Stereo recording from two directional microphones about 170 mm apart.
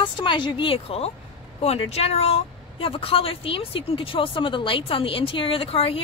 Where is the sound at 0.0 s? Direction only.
30° left (ahead or behind).